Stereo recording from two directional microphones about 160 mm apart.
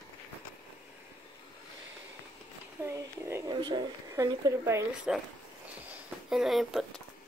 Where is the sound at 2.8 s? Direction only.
15° right (ahead or behind).